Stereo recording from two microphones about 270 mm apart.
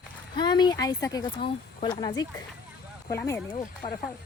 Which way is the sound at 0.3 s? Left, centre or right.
Centre.